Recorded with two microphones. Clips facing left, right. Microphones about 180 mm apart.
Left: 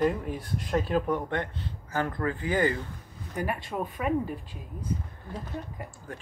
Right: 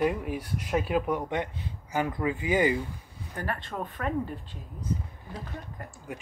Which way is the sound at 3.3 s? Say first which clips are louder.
Left 3 dB; 10° left (ahead or behind).